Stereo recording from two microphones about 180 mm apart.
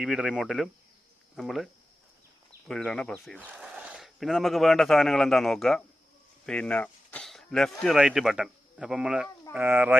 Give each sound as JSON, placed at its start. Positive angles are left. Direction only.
{"t": 0.0, "sound": "speech", "side_deg": -5}